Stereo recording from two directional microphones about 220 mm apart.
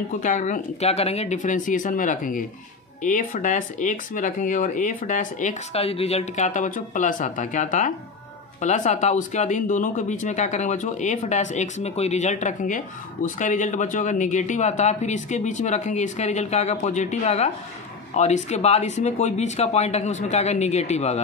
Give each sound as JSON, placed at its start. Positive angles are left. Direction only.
{"t": 0.2, "sound": "speech", "side_deg": 35}